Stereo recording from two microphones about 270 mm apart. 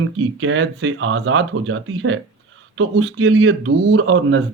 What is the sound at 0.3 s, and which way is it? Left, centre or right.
Speech, right.